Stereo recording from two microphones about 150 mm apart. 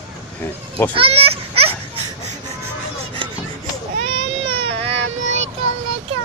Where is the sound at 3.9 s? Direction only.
40° right (ahead or behind).